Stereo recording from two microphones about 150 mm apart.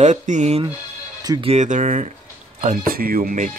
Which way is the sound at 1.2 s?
35° right (ahead or behind).